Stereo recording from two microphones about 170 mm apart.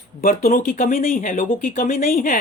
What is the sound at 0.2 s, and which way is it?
Speech, 55° left (ahead or behind).